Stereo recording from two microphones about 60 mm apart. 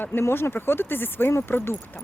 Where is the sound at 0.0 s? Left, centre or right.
Left.